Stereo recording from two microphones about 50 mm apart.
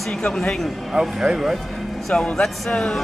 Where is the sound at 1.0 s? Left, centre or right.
Centre.